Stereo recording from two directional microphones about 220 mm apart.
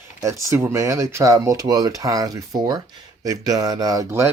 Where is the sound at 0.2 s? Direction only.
15° right (ahead or behind).